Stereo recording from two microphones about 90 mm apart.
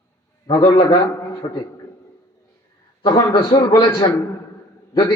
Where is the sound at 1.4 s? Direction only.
50° left (ahead or behind).